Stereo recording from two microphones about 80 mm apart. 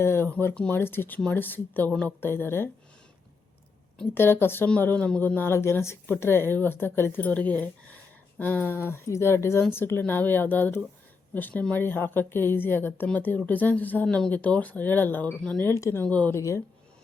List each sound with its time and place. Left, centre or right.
0.0 s a woman's voice: left
4.1 s a woman's voice: left
15.6 s speech: left
16.0 s speech: centre
16.3 s speech: left